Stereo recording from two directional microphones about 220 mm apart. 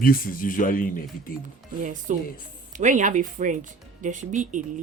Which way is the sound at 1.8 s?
35° right (ahead or behind).